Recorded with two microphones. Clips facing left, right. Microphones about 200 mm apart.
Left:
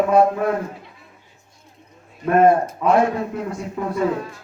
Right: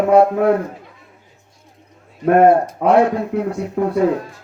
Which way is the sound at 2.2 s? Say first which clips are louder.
Right 3 dB; 65° right (ahead or behind).